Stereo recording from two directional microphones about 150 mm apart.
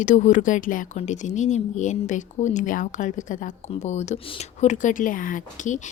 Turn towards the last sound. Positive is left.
turn(degrees=55)  # may be behind; listen again after turning